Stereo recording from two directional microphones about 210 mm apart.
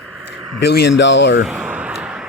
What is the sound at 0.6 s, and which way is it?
Speech, 50° left (ahead or behind).